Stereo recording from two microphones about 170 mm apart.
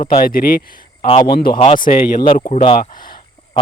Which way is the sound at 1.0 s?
30° left (ahead or behind).